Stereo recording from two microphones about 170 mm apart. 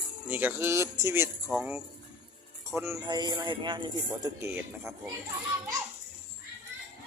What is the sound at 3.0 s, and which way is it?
Speech, 25° right (ahead or behind).